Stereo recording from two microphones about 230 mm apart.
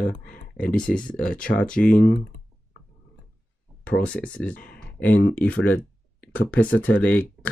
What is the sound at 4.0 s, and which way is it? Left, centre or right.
Speech, centre.